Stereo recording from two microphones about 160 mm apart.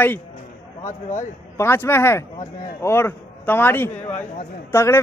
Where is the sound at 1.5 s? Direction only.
15° left (ahead or behind).